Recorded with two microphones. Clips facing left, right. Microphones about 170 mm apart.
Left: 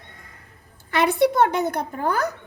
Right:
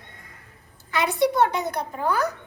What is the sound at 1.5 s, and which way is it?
Speech, 50° left (ahead or behind).